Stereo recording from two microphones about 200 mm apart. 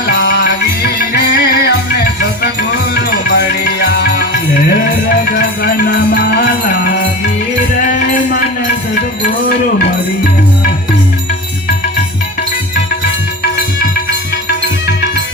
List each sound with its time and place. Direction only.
0.1 s music: 55° left (ahead or behind)
5.3 s music: 45° left (ahead or behind)